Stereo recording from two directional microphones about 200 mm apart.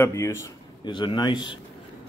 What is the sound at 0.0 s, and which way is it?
Speech, 15° left (ahead or behind).